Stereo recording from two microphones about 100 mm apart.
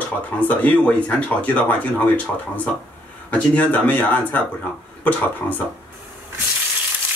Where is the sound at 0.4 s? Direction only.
15° left (ahead or behind).